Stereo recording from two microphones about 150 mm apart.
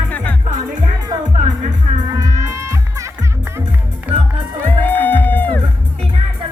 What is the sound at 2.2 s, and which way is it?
Music, 20° right (ahead or behind).